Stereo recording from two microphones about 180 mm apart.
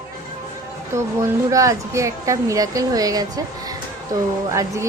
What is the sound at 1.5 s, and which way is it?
A woman's voice, 15° right (ahead or behind).